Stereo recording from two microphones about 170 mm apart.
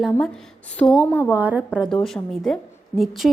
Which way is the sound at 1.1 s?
10° left (ahead or behind).